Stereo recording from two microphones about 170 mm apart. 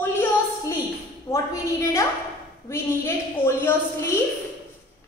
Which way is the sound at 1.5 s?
20° left (ahead or behind).